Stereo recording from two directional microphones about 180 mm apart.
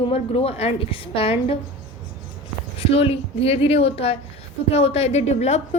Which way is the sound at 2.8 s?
35° left (ahead or behind).